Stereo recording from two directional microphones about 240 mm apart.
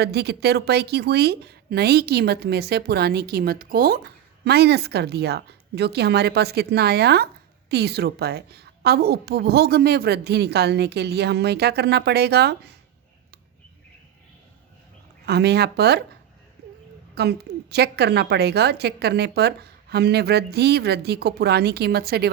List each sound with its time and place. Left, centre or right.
0.0 s a woman's voice: right
15.3 s a woman's voice: right
17.2 s a woman's voice: right